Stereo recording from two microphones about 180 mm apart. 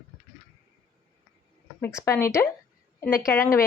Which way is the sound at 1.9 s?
15° left (ahead or behind).